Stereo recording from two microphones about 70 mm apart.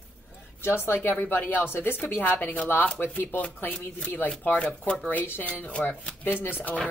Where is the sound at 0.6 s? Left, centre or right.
Left.